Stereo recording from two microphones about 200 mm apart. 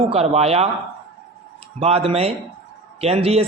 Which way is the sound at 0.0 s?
30° right (ahead or behind).